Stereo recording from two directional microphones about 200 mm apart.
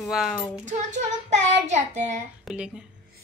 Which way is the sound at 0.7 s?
35° right (ahead or behind).